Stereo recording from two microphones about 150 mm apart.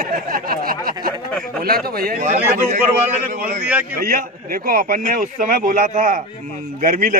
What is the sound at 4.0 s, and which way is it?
Speech, 75° right (ahead or behind).